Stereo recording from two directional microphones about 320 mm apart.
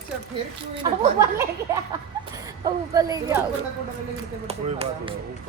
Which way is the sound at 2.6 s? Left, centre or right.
Centre.